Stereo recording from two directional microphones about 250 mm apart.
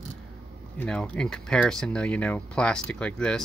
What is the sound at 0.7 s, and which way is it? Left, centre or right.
Speech, centre.